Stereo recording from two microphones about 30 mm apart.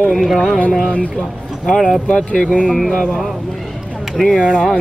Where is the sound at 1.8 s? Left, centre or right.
Left.